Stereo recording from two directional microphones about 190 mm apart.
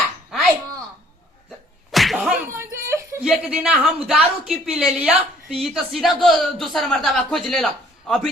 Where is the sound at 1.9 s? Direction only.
Centre (ahead or behind).